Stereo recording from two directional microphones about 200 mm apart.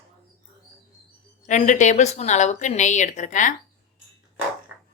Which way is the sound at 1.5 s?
35° left (ahead or behind).